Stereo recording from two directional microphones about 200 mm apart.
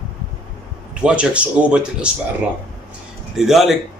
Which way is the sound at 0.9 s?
5° right (ahead or behind).